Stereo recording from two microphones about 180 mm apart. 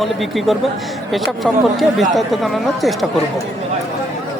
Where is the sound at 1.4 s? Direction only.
Centre (ahead or behind).